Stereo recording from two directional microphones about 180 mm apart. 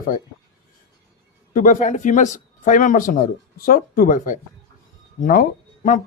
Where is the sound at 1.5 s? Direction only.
45° left (ahead or behind).